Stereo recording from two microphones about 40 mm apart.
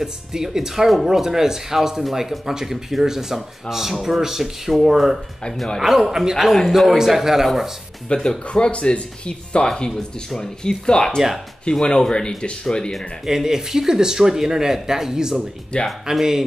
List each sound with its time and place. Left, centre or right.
0.0 s speech: centre
8.1 s speech: left
13.2 s speech: centre
15.7 s speech: left
16.1 s speech: centre